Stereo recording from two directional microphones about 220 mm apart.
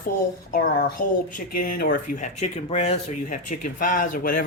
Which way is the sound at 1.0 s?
35° left (ahead or behind).